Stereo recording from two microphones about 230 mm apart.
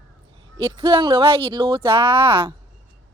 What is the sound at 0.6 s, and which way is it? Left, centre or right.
Speech, right.